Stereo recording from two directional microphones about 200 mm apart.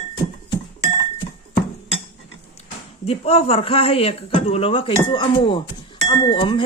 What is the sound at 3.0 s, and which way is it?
Speech, 30° left (ahead or behind).